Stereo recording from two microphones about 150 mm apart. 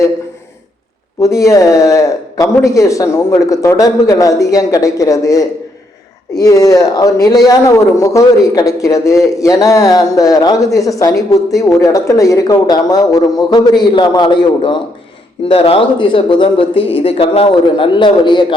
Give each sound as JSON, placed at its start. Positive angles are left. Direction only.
{"t": 1.2, "sound": "a woman's voice", "side_deg": 20}